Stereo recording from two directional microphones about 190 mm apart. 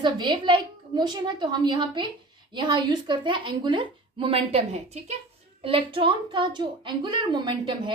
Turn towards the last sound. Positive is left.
turn(degrees=-25)  # may be behind; listen again after turning